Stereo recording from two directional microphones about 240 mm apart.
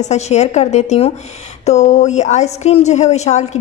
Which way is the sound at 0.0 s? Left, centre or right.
Left.